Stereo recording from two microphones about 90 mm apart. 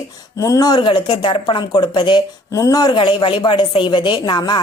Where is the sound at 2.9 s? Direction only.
60° left (ahead or behind).